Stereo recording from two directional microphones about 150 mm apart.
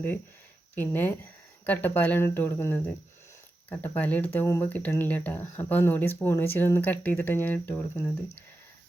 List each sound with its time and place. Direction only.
0.8 s speech: 15° left (ahead or behind)